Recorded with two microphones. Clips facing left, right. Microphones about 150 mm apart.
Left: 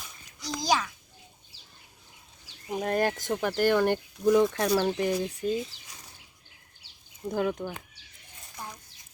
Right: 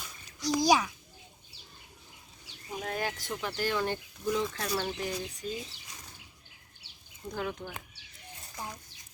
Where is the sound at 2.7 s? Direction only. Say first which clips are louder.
Left 8 dB; 50° left (ahead or behind).